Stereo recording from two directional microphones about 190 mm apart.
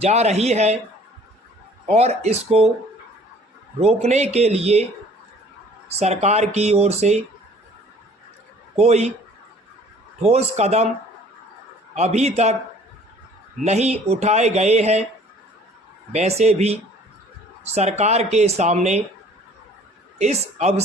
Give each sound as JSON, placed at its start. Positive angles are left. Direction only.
{"t": 0.0, "sound": "speech", "side_deg": -35}
{"t": 1.9, "sound": "speech", "side_deg": -35}
{"t": 3.8, "sound": "speech", "side_deg": -35}
{"t": 5.9, "sound": "speech", "side_deg": -35}
{"t": 8.7, "sound": "a man's voice", "side_deg": -35}
{"t": 10.2, "sound": "speech", "side_deg": -35}
{"t": 11.9, "sound": "speech", "side_deg": -35}
{"t": 13.7, "sound": "speech", "side_deg": -35}
{"t": 16.1, "sound": "speech", "side_deg": -35}
{"t": 20.1, "sound": "speech", "side_deg": -35}